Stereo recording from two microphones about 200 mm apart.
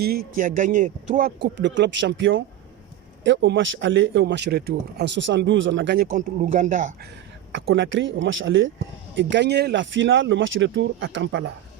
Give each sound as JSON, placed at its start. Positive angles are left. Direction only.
{"t": 0.0, "sound": "speech", "side_deg": -50}
{"t": 7.5, "sound": "speech", "side_deg": -70}